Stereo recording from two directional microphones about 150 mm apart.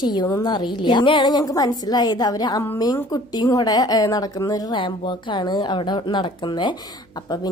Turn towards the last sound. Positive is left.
turn(degrees=30)  # may be behind; listen again after turning